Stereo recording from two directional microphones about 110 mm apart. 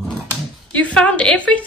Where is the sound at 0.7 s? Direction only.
10° left (ahead or behind).